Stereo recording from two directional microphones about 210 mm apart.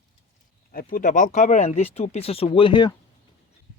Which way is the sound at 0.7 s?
45° left (ahead or behind).